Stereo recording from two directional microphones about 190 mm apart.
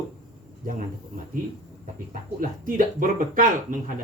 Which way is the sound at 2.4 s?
45° right (ahead or behind).